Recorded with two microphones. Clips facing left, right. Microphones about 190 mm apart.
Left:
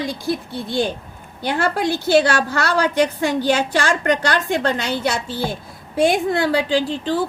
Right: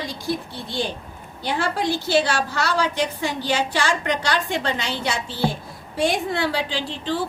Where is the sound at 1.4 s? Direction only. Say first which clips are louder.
Left 4 dB; 55° left (ahead or behind).